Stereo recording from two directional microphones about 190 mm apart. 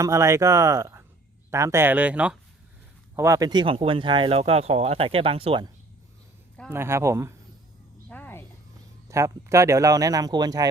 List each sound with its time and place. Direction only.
0.0 s speech: 15° right (ahead or behind)
6.7 s speech: 15° right (ahead or behind)
8.1 s a sound: 10° left (ahead or behind)
9.0 s speech: 15° right (ahead or behind)